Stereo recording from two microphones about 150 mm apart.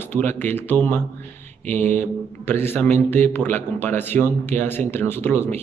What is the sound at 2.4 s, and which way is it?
Speech, 15° left (ahead or behind).